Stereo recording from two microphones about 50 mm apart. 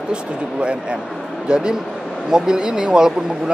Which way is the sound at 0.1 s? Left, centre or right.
Centre.